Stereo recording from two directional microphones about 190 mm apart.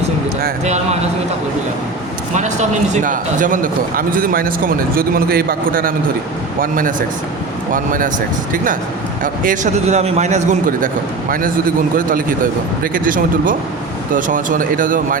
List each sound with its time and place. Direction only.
2.3 s a man's voice: 40° right (ahead or behind)